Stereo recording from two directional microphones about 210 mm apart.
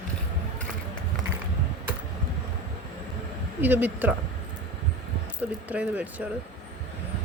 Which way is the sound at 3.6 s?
10° right (ahead or behind).